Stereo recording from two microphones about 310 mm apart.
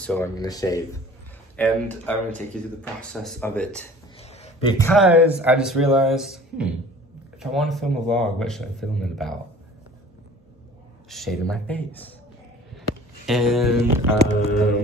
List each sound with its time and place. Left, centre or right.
0.0 s speech: centre
4.2 s a sound: centre
5.0 s speech: centre
11.1 s speech: centre
13.3 s speech: centre